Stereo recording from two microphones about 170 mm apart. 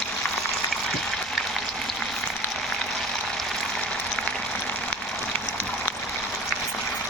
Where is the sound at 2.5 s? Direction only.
Centre (ahead or behind).